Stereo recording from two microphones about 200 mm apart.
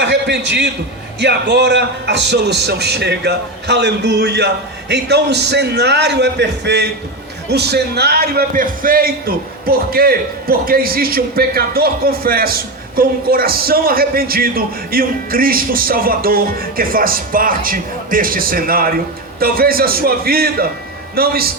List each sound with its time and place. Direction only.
0.0 s a man's voice: 60° right (ahead or behind)